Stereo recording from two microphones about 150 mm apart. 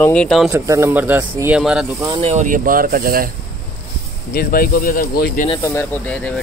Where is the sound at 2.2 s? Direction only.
50° right (ahead or behind); by 3.3 s 70° right (ahead or behind).